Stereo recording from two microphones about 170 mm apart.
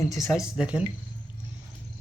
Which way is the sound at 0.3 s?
Centre (ahead or behind).